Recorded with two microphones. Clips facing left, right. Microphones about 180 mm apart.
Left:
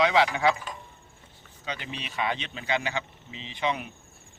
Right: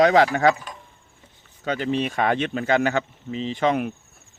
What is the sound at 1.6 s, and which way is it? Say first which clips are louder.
Speech: right 13 dB; 50° right (ahead or behind).